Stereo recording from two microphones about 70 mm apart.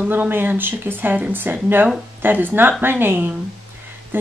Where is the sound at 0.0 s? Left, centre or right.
Right.